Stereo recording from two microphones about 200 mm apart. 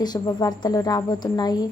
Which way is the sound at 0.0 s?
20° left (ahead or behind).